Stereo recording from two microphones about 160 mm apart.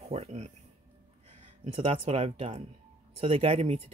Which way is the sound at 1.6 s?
40° right (ahead or behind).